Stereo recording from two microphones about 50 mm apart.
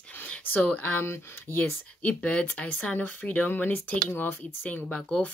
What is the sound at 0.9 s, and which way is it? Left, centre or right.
Speech, left.